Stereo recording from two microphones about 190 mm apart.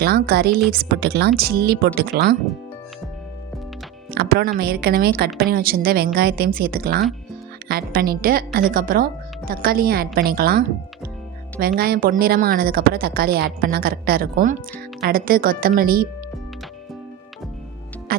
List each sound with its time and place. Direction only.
0.0 s a woman's voice: 55° right (ahead or behind)
4.1 s a woman's voice: 55° right (ahead or behind)
11.8 s a woman's voice: 50° right (ahead or behind)
18.1 s music: 50° right (ahead or behind)